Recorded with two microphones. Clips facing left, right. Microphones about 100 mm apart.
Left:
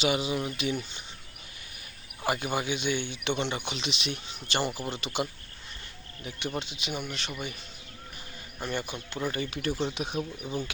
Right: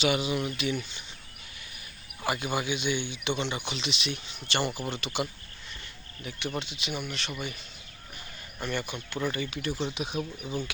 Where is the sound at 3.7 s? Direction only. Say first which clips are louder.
Even; 45° left (ahead or behind).